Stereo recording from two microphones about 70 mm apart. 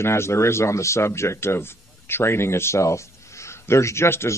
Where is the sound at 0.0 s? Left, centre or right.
Left.